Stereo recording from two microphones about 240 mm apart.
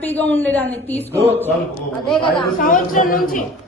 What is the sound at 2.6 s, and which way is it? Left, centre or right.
Speech, left.